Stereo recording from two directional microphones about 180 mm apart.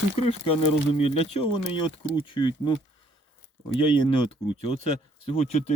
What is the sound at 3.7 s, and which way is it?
Speech, 30° left (ahead or behind).